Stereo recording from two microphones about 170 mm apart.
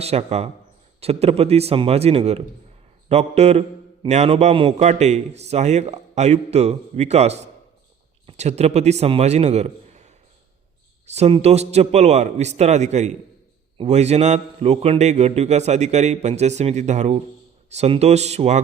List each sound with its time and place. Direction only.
0.0 s a man's voice: 35° right (ahead or behind)